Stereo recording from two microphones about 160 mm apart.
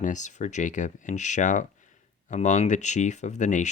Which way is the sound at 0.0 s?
50° left (ahead or behind).